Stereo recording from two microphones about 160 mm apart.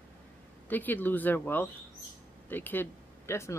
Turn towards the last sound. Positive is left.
turn(degrees=15)  # may be behind; listen again after turning